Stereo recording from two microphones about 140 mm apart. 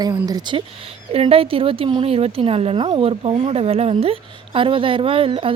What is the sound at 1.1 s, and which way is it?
Speech, 45° right (ahead or behind).